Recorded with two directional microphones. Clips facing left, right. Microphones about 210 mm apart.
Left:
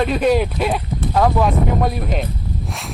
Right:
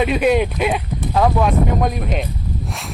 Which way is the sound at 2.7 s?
Centre (ahead or behind).